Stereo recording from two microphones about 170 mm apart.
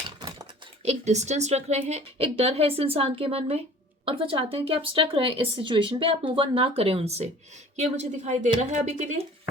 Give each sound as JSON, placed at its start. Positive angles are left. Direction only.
{"t": 0.8, "sound": "speech", "side_deg": -40}